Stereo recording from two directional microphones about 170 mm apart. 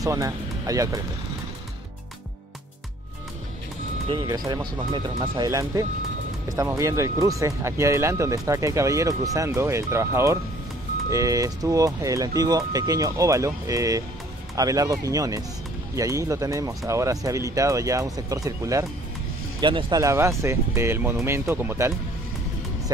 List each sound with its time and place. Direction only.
0.0 s speech: 20° right (ahead or behind)
4.1 s speech: 25° right (ahead or behind)
20.0 s speech: 15° right (ahead or behind)